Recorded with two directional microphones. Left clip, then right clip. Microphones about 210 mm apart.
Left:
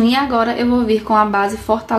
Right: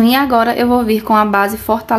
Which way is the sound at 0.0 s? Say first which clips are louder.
Right 4 dB; 35° right (ahead or behind).